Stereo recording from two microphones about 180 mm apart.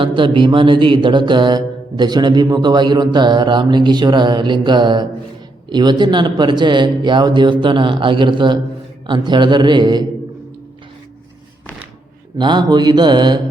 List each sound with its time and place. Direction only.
0.0 s music: 25° right (ahead or behind)
12.4 s music: 25° right (ahead or behind)